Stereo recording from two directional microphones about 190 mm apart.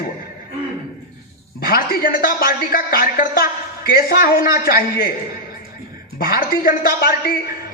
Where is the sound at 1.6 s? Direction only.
50° left (ahead or behind).